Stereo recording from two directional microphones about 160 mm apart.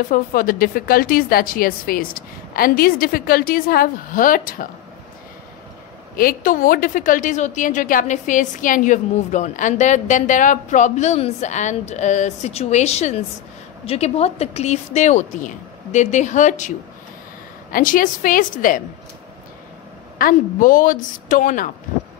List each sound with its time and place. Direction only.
0.1 s a woman's voice: 60° left (ahead or behind)
6.1 s a woman's voice: 60° left (ahead or behind)
20.2 s a woman's voice: 60° left (ahead or behind)